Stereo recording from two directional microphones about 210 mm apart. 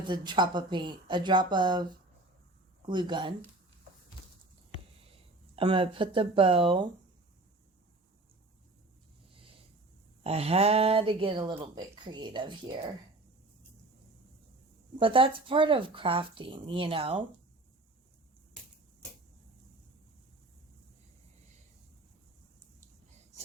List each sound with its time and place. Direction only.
0.0 s speech: 20° right (ahead or behind)
5.5 s speech: 25° right (ahead or behind)
10.2 s speech: 30° right (ahead or behind)
14.9 s speech: 25° right (ahead or behind)